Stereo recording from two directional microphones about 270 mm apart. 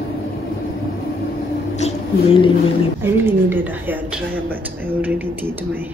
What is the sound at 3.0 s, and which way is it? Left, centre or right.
A woman's voice, centre.